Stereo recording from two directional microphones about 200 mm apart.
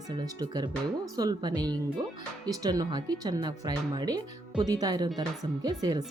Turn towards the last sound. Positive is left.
turn(degrees=-20)  # may be behind; listen again after turning